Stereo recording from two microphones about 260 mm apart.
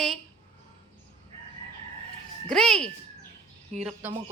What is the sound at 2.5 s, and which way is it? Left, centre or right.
A woman's voice, centre.